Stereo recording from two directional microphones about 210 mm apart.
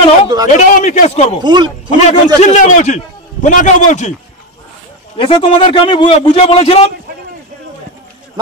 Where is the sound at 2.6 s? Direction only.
35° left (ahead or behind).